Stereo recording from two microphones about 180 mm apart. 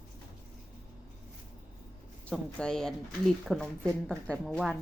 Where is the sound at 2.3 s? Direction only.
5° left (ahead or behind).